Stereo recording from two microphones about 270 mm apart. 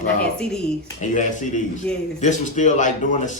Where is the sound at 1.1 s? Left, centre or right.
Left.